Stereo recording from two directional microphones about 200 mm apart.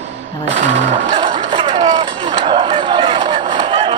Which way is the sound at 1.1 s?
25° right (ahead or behind).